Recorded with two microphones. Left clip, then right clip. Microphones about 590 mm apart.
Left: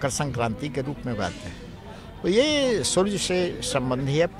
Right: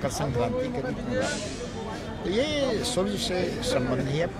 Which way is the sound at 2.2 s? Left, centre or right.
Left.